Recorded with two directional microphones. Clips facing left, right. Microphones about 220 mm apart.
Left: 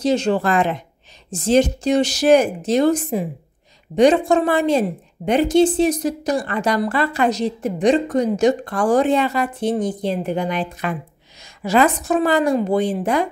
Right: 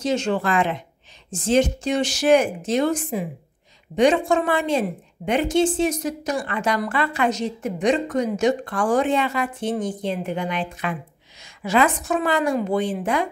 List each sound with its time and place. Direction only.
0.0 s a woman's voice: 35° left (ahead or behind)